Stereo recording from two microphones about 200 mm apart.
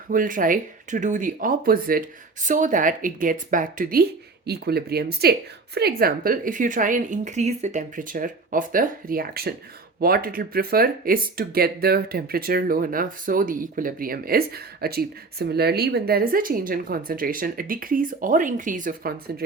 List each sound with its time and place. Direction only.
0.1 s speech: 45° right (ahead or behind)